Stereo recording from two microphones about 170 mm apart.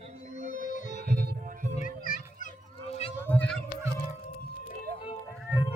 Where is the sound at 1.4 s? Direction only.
45° right (ahead or behind).